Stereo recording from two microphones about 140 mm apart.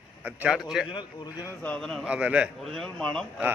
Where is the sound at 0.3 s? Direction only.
10° right (ahead or behind).